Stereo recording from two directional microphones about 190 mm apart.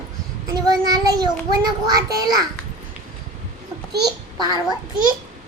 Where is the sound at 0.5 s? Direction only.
20° right (ahead or behind).